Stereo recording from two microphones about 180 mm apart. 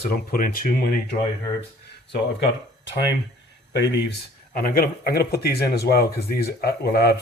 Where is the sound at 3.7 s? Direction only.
70° left (ahead or behind).